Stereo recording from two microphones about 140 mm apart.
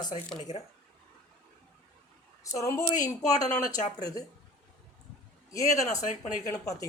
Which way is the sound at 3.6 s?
60° left (ahead or behind).